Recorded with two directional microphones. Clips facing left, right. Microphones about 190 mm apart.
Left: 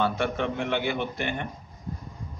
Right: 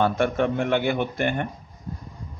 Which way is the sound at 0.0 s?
50° right (ahead or behind).